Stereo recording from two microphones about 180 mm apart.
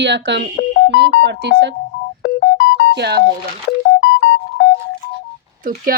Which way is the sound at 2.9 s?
65° right (ahead or behind).